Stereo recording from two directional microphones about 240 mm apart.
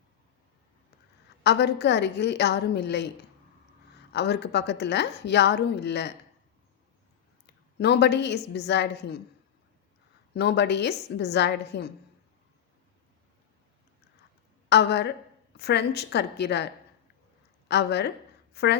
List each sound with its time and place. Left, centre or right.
1.5 s a woman's voice: left
4.1 s a woman's voice: left
7.4 s a woman's voice: left
10.3 s a woman's voice: left
14.7 s a woman's voice: left
17.7 s a woman's voice: left